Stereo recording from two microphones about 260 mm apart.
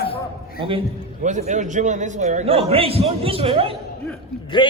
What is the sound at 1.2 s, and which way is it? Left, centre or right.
A man's voice, right.